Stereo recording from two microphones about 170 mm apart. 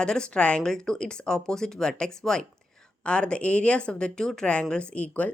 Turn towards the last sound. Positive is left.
turn(degrees=10)  # may be behind; listen again after turning